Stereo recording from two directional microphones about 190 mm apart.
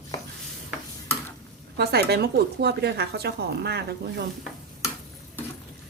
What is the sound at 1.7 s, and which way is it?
Speech, 60° right (ahead or behind).